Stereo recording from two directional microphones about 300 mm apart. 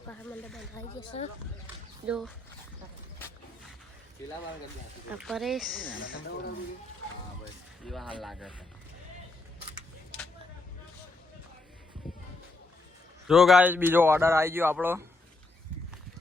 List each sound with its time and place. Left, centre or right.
0.1 s speech: centre
1.0 s speech: centre
1.6 s speech: centre
5.1 s speech: centre
5.8 s speech: left
7.9 s speech: centre
13.2 s a man's voice: centre